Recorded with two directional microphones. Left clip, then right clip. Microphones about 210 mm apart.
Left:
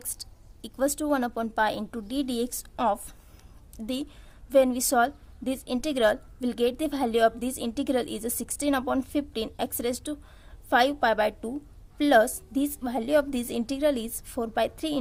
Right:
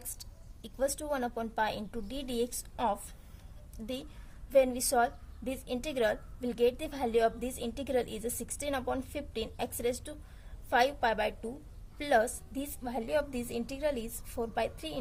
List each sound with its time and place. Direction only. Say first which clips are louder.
0.2 s a woman's voice: left 7 dB; 35° left (ahead or behind)